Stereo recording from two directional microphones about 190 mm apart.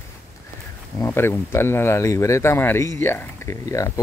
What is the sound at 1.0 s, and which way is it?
Speech, 15° left (ahead or behind).